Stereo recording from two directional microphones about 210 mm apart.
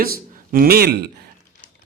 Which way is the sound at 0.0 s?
45° right (ahead or behind).